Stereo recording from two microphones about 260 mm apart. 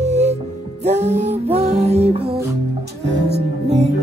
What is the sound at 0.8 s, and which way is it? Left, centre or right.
Music, right.